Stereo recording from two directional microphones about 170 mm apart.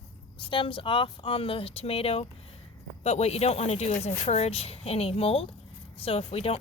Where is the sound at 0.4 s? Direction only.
30° left (ahead or behind).